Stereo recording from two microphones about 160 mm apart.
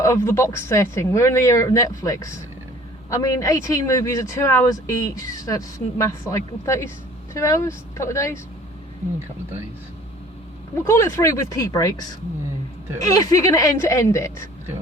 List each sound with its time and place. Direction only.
0.0 s a woman's voice: 20° left (ahead or behind)
10.8 s a woman's voice: 20° left (ahead or behind)